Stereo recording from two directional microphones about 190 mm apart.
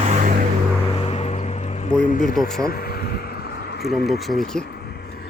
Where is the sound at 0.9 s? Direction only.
35° left (ahead or behind).